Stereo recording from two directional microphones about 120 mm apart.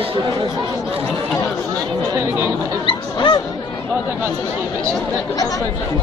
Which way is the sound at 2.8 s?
40° left (ahead or behind).